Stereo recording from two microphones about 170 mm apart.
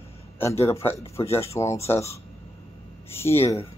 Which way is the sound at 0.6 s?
15° left (ahead or behind).